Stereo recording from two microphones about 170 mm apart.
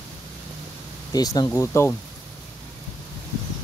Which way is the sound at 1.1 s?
25° left (ahead or behind).